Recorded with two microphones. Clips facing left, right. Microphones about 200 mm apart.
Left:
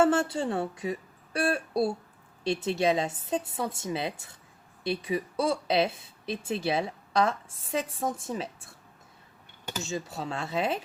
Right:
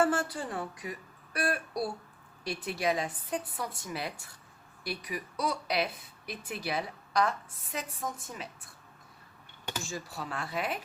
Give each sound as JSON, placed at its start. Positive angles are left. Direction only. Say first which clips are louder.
{"t": 0.0, "sound": "speech", "louder": "left 5 dB", "side_deg": 25}
{"t": 9.8, "sound": "speech", "louder": "left 9 dB", "side_deg": 25}